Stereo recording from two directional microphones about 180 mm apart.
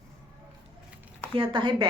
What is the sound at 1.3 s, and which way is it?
Speech, 30° right (ahead or behind).